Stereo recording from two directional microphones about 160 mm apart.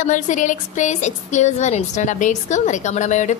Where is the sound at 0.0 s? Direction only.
50° left (ahead or behind).